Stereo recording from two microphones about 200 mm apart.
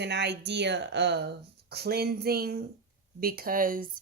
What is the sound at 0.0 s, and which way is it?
Speech, 60° right (ahead or behind).